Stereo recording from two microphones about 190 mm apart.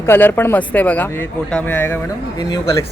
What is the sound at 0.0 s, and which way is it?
Speech, 10° left (ahead or behind).